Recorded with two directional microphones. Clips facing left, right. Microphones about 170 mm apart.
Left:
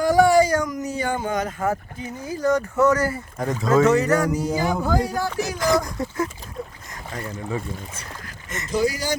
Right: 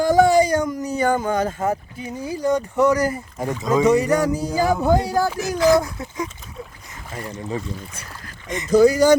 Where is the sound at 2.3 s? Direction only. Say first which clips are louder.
Even; 15° right (ahead or behind).